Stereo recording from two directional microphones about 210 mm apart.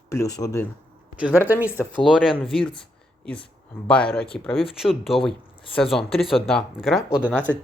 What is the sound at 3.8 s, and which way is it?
Speech, 5° left (ahead or behind).